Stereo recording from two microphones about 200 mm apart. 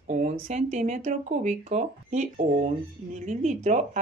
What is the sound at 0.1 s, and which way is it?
Speech, 35° right (ahead or behind).